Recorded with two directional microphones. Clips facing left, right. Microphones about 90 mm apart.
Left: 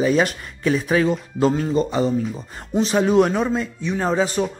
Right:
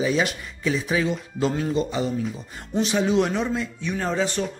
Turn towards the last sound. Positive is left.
turn(degrees=40)  # may be behind; listen again after turning